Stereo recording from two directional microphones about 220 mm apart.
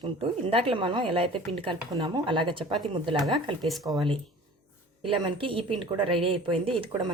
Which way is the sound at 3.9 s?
20° right (ahead or behind).